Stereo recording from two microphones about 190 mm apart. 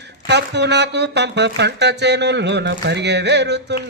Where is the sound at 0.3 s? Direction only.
65° right (ahead or behind).